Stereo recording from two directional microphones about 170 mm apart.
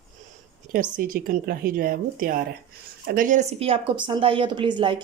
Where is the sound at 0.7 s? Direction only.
55° right (ahead or behind); by 5.0 s 30° right (ahead or behind).